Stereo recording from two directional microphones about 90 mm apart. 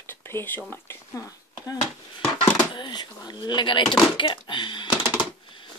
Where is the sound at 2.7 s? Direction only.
55° left (ahead or behind).